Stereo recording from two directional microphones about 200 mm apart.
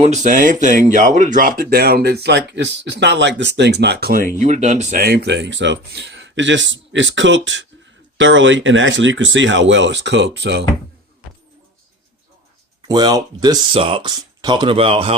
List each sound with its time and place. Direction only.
0.0 s speech: 35° right (ahead or behind)
4.4 s speech: 35° right (ahead or behind); by 10.7 s 60° right (ahead or behind)
12.9 s speech: 20° right (ahead or behind)